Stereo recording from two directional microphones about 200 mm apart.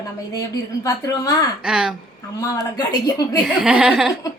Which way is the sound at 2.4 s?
15° left (ahead or behind).